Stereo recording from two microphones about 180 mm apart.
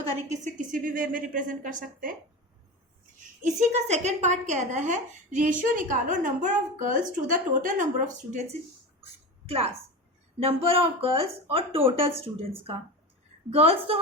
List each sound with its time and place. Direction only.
0.3 s a woman's voice: 45° right (ahead or behind)
3.4 s a woman's voice: 40° right (ahead or behind)
9.5 s speech: 35° right (ahead or behind)